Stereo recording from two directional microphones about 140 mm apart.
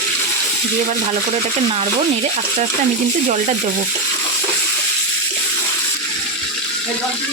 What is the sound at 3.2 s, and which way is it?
Speech, 65° right (ahead or behind).